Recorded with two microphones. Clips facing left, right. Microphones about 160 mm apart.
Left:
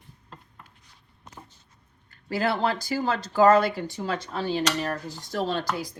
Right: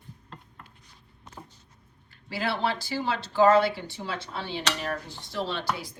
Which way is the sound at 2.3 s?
45° left (ahead or behind).